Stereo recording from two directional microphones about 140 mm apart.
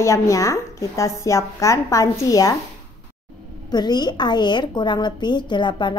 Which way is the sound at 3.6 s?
30° left (ahead or behind).